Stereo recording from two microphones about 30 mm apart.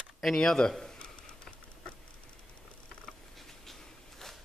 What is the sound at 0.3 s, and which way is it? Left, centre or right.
Speech, centre.